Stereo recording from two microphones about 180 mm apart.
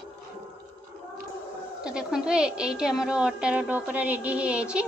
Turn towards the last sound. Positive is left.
turn(degrees=-5)  # may be behind; listen again after turning